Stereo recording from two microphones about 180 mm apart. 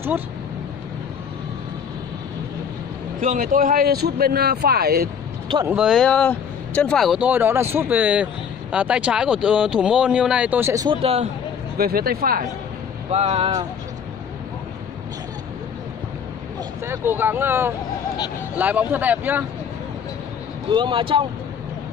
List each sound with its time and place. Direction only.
3.2 s speech: 45° right (ahead or behind)
5.7 s speech: 5° right (ahead or behind)
11.0 s speech: 35° right (ahead or behind)
11.8 s speech: 55° right (ahead or behind)
13.1 s speech: 35° right (ahead or behind)
16.8 s speech: 15° right (ahead or behind)
20.7 s speech: 25° right (ahead or behind)